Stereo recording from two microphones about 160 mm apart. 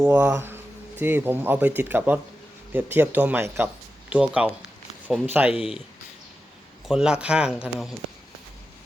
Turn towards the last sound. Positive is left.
turn(degrees=-5)  # may be behind; listen again after turning